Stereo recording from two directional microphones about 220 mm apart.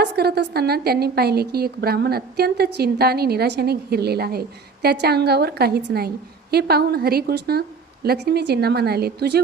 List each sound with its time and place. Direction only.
0.0 s a woman's voice: 45° right (ahead or behind)